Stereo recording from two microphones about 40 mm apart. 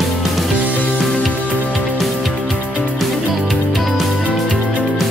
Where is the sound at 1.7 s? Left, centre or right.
Centre.